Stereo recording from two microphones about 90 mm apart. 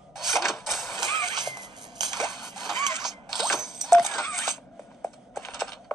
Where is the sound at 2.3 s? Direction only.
5° right (ahead or behind).